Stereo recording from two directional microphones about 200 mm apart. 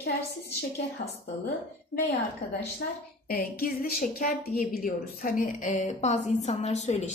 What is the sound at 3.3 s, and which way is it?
A woman's voice, 45° left (ahead or behind).